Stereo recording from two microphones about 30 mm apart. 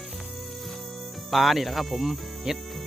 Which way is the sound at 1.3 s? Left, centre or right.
Centre.